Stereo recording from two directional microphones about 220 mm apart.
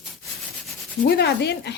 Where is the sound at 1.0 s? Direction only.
50° left (ahead or behind).